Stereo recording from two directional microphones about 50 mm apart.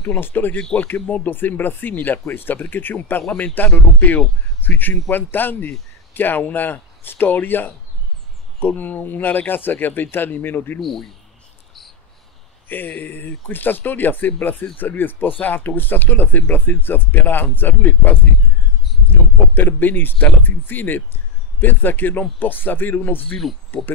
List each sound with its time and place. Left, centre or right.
0.2 s speech: left
0.7 s speech: left
10.8 s speech: centre
12.6 s speech: left
19.5 s speech: left